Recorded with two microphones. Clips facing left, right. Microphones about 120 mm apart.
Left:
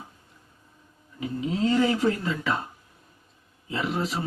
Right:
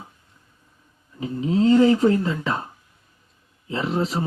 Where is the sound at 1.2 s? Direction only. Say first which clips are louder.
Right 6 dB; 35° right (ahead or behind).